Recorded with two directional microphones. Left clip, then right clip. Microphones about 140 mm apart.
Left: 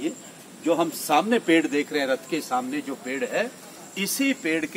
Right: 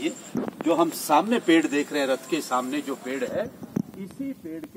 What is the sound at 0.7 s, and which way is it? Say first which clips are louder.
A man's voice: even; centre (ahead or behind).